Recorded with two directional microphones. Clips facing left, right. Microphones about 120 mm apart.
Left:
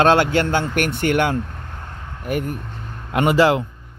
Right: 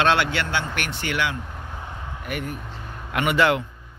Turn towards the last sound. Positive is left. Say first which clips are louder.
# left 5 dB
turn(degrees=30)  # may be behind; listen again after turning